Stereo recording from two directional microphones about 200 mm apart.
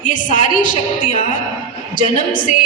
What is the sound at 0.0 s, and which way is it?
A woman's voice, 40° left (ahead or behind).